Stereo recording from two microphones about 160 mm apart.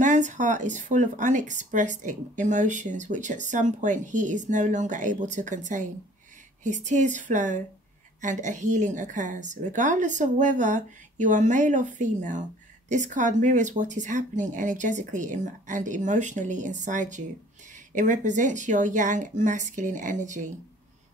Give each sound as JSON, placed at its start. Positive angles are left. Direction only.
{"t": 0.0, "sound": "a woman's voice", "side_deg": -50}